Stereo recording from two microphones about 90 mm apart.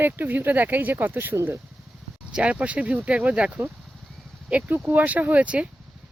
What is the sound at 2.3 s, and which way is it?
Speech, 15° right (ahead or behind).